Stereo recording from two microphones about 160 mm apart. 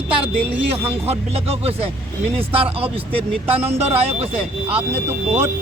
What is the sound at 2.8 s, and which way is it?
Speech, 35° right (ahead or behind).